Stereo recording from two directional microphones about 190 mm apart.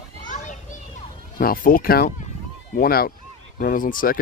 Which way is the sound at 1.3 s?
45° left (ahead or behind).